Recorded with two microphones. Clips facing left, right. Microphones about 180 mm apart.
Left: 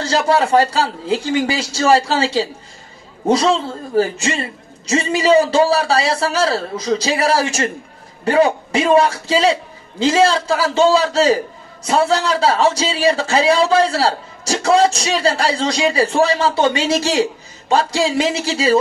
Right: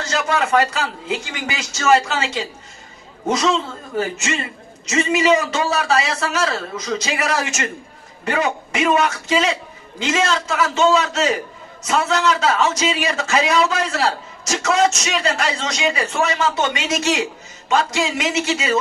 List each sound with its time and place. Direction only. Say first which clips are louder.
0.0 s a man's voice: left 5 dB; 30° left (ahead or behind)